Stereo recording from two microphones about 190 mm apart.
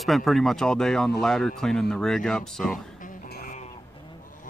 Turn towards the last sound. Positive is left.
turn(degrees=50)  # may be behind; listen again after turning